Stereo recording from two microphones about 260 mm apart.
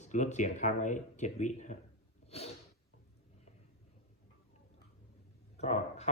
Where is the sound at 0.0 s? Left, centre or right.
Left.